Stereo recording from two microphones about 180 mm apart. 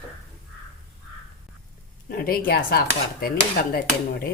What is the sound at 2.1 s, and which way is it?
Cutlery, 55° left (ahead or behind).